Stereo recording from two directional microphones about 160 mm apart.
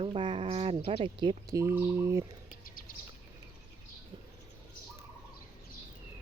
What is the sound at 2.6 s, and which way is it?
Bird, 60° left (ahead or behind).